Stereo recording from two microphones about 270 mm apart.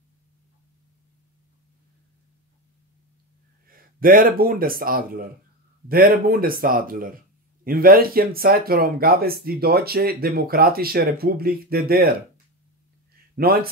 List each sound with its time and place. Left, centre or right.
3.6 s speech: right
13.4 s speech: right